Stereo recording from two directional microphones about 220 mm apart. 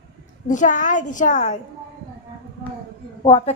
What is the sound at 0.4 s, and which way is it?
A child's voice, 35° left (ahead or behind).